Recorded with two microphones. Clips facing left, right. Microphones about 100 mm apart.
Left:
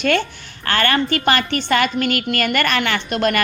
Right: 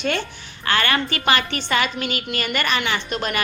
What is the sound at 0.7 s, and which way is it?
A woman's voice, 45° left (ahead or behind).